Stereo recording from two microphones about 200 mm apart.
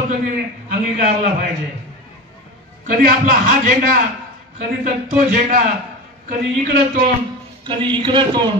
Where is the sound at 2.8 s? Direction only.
45° right (ahead or behind).